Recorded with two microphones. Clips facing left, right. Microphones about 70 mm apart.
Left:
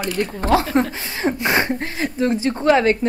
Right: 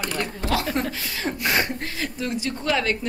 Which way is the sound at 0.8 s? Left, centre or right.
Left.